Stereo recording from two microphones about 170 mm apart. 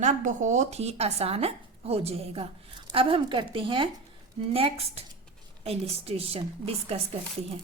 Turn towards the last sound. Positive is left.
turn(degrees=-35)  # may be behind; listen again after turning